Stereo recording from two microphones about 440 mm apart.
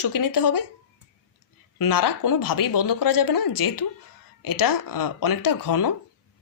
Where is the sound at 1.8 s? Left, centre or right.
Left.